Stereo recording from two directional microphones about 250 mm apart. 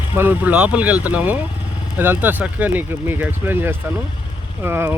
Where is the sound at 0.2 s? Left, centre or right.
Centre.